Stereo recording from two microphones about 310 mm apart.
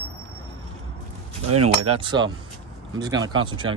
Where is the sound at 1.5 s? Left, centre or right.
Right.